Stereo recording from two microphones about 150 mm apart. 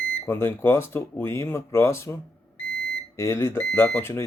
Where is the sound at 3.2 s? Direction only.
15° left (ahead or behind).